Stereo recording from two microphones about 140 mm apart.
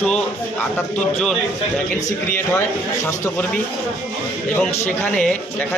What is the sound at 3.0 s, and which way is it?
Speech, 15° left (ahead or behind).